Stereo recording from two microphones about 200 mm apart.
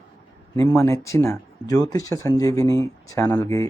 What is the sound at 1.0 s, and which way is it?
Speech, 15° left (ahead or behind).